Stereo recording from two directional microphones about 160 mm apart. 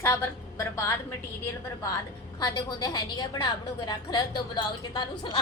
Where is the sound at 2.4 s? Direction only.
25° left (ahead or behind).